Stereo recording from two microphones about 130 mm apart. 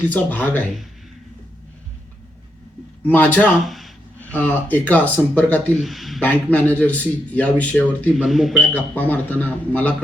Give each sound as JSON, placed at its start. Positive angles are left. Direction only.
{"t": 0.1, "sound": "speech", "side_deg": 15}
{"t": 3.0, "sound": "speech", "side_deg": 15}
{"t": 3.7, "sound": "a sound", "side_deg": 0}
{"t": 4.2, "sound": "speech", "side_deg": 15}
{"t": 5.7, "sound": "speech", "side_deg": 0}
{"t": 6.2, "sound": "speech", "side_deg": 10}
{"t": 8.1, "sound": "speech", "side_deg": 0}
{"t": 8.6, "sound": "speech", "side_deg": 10}